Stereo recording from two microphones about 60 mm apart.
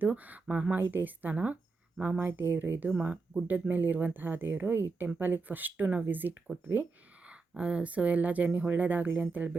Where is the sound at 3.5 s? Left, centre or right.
Right.